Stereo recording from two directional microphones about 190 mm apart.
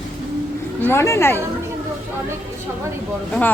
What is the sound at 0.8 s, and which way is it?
Speech, 10° left (ahead or behind).